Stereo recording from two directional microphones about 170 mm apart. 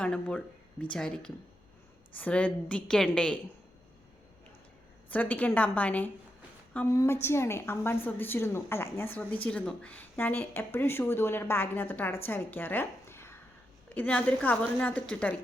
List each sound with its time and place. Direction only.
0.0 s speech: 5° left (ahead or behind)
5.1 s a woman's voice: 10° left (ahead or behind)